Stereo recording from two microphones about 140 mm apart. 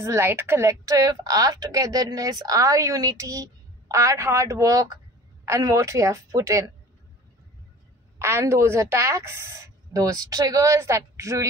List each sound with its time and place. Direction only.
0.0 s a woman's voice: 20° right (ahead or behind)
8.2 s a woman's voice: 20° right (ahead or behind)